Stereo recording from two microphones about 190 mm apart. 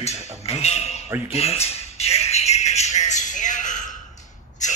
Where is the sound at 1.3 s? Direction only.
35° left (ahead or behind).